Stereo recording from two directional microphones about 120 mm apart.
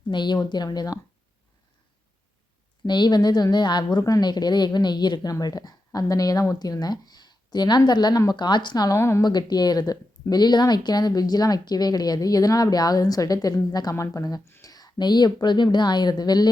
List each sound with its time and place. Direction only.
0.1 s a woman's voice: 40° left (ahead or behind)
2.8 s a woman's voice: 40° left (ahead or behind)
9.0 s speech: 20° left (ahead or behind)
9.2 s a woman's voice: 35° left (ahead or behind)